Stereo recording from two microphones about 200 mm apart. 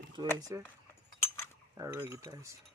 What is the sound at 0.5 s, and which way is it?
Cutlery, 15° right (ahead or behind).